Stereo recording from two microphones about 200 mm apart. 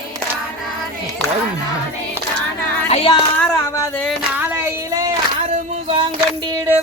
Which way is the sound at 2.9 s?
30° left (ahead or behind).